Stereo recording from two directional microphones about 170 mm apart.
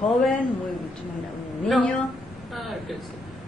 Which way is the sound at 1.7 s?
5° left (ahead or behind).